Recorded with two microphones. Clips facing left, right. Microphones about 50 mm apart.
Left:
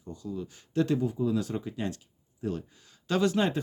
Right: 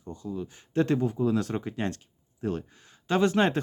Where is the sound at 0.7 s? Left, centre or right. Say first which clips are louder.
Right 2 dB; right.